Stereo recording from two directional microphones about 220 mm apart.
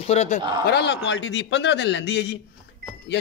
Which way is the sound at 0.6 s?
50° left (ahead or behind).